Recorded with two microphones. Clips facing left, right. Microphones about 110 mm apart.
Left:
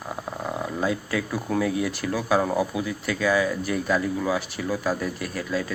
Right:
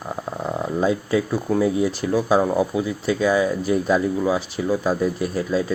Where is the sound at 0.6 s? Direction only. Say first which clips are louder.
Right 6 dB; 25° right (ahead or behind).